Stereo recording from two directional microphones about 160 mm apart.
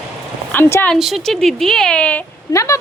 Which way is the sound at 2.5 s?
20° left (ahead or behind).